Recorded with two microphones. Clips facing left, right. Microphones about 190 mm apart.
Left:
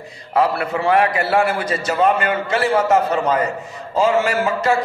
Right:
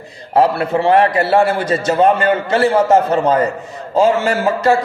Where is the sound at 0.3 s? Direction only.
30° right (ahead or behind).